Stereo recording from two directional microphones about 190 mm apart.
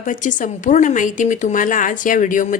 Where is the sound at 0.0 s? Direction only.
40° left (ahead or behind).